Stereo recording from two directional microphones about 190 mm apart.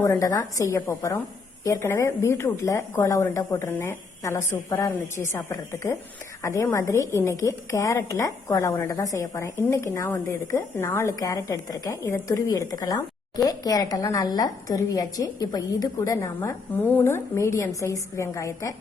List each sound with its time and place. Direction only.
0.0 s a woman's voice: 15° left (ahead or behind)